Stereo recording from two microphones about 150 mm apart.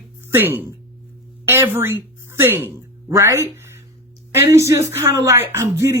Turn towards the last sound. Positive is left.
turn(degrees=-20)  # may be behind; listen again after turning